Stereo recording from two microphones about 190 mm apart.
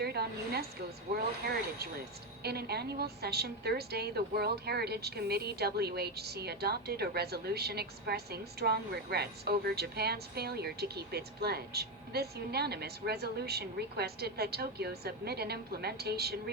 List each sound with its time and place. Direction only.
0.0 s a sound: 55° right (ahead or behind)
1.1 s a woman's voice: 55° right (ahead or behind)
2.4 s a woman's voice: 55° right (ahead or behind)